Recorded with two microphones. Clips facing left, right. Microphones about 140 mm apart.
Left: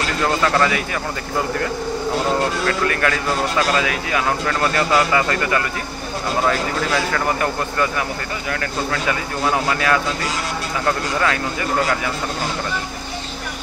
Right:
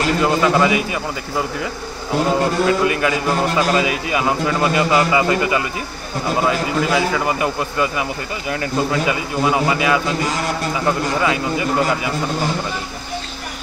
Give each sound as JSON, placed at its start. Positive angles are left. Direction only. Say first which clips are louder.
{"t": 0.2, "sound": "a man's voice", "louder": "right 1 dB", "side_deg": -10}
{"t": 2.6, "sound": "a man's voice", "louder": "right 3 dB", "side_deg": -10}